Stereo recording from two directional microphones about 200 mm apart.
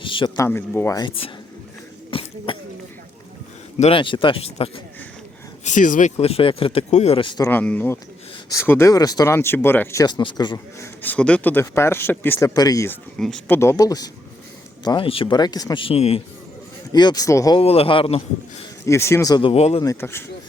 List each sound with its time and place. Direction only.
0.0 s speech: 25° left (ahead or behind)
0.3 s speech: 10° left (ahead or behind)
2.0 s cough: 25° left (ahead or behind)
3.8 s speech: 30° left (ahead or behind)
11.0 s speech: 5° left (ahead or behind)
13.1 s speech: 5° left (ahead or behind)
13.6 s speech: 15° left (ahead or behind)
17.6 s speech: 30° left (ahead or behind)
18.9 s speech: 15° left (ahead or behind); by 19.8 s 30° left (ahead or behind)
19.8 s speech: 15° left (ahead or behind)